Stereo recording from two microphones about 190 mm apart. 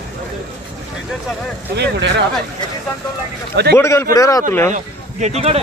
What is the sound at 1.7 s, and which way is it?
Speech, 65° right (ahead or behind).